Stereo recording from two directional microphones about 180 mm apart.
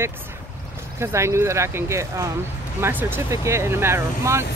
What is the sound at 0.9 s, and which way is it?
Speech, 15° right (ahead or behind).